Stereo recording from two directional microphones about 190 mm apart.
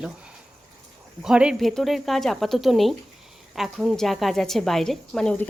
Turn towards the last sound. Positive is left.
turn(degrees=5)  # may be behind; listen again after turning